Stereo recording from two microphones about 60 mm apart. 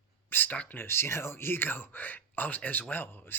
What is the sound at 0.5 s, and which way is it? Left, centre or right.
Speech, left.